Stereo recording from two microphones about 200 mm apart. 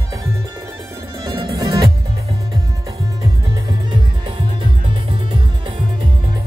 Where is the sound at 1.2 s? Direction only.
15° right (ahead or behind).